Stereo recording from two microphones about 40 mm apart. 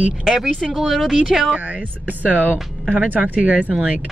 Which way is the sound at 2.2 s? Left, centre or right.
Right.